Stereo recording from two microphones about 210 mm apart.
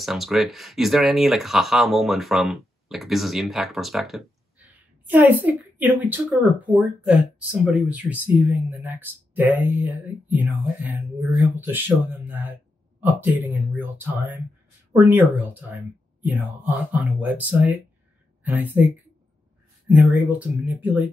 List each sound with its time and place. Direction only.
0.0 s a woman's voice: centre (ahead or behind)
20.0 s speech: 5° right (ahead or behind)